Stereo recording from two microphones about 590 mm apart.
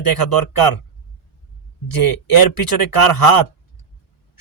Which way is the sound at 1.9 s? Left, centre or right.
Left.